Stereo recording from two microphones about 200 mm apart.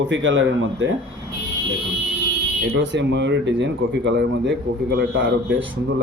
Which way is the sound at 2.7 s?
65° right (ahead or behind).